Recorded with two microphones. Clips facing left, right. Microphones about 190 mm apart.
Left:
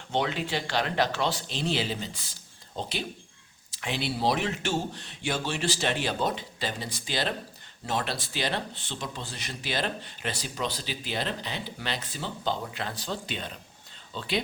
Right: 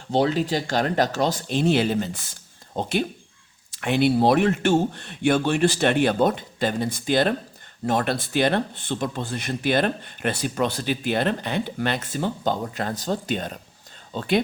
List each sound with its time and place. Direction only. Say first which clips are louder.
0.1 s speech: right 8 dB; 35° right (ahead or behind)